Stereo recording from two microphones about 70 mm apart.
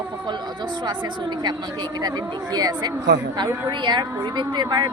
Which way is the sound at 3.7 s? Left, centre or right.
Right.